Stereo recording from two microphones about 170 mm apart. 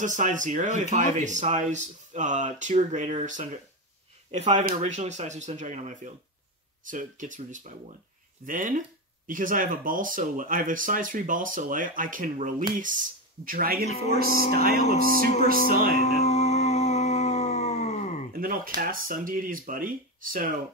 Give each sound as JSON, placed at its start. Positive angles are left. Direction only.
{"t": 0.0, "sound": "speech", "side_deg": -50}
{"t": 16.0, "sound": "music", "side_deg": 40}
{"t": 18.3, "sound": "a sound", "side_deg": -55}
{"t": 18.8, "sound": "speech", "side_deg": -55}